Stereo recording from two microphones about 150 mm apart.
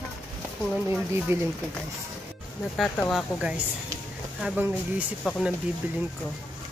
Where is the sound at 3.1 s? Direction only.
5° right (ahead or behind).